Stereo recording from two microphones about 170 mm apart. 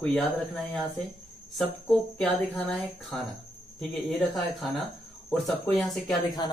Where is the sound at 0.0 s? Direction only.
Centre (ahead or behind).